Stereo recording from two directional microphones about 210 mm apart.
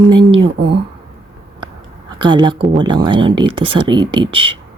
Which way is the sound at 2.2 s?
20° right (ahead or behind).